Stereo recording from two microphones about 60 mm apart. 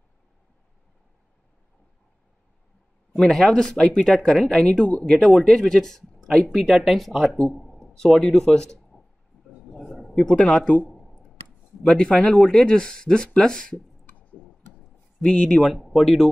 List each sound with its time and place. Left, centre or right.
3.2 s speech: centre
5.2 s speech: centre
9.6 s a sound: centre
10.1 s speech: centre
10.9 s a sound: centre
11.8 s speech: centre
15.2 s speech: centre
15.6 s speech: centre